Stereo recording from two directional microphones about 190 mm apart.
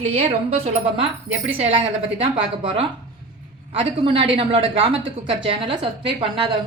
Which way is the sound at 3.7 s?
30° right (ahead or behind).